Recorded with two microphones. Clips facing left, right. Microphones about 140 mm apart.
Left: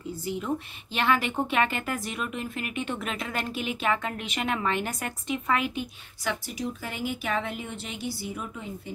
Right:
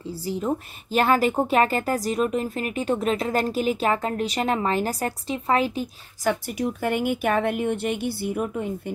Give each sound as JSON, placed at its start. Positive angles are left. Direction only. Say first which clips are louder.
{"t": 0.1, "sound": "speech", "louder": "right 4 dB", "side_deg": -35}
{"t": 6.6, "sound": "speech", "louder": "right 10 dB", "side_deg": -55}